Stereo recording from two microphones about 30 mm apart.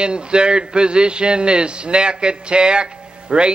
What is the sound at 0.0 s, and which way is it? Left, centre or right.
A man's voice, right.